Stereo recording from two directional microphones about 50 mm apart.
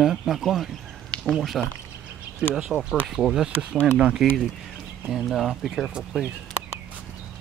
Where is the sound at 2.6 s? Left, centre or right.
Centre.